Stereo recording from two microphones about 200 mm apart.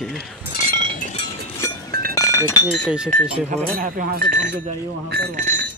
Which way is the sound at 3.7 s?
45° right (ahead or behind).